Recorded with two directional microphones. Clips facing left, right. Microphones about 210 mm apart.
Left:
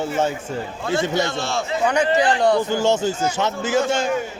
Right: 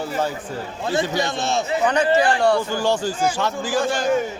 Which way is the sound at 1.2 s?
20° right (ahead or behind).